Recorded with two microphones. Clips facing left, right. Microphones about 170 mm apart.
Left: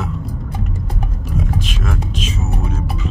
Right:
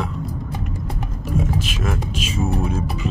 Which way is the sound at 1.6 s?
5° right (ahead or behind).